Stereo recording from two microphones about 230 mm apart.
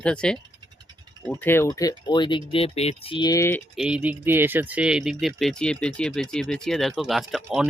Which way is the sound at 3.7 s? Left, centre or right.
Centre.